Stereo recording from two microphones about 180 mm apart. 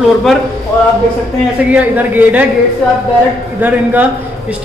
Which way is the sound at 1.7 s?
10° right (ahead or behind).